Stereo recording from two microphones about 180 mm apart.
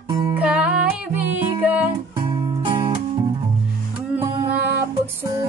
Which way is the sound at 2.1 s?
25° right (ahead or behind).